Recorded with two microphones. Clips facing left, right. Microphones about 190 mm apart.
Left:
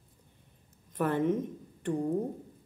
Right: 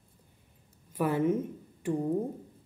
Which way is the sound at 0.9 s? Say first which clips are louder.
Right 1 dB; 10° right (ahead or behind).